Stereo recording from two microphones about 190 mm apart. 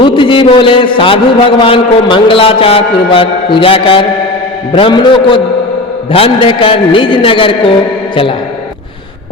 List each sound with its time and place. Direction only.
0.0 s a man's voice: 25° left (ahead or behind)